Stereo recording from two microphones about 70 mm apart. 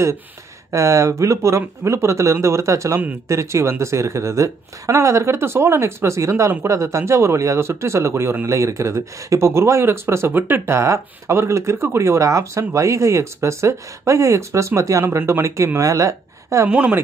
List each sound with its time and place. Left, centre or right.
0.7 s speech: right
15.0 s speech: right
16.6 s speech: centre